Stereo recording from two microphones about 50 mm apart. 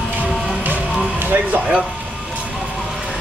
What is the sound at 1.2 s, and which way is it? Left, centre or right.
Speech, right.